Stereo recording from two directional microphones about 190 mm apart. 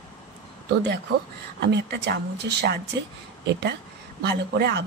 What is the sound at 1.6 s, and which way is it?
Speech, 65° right (ahead or behind).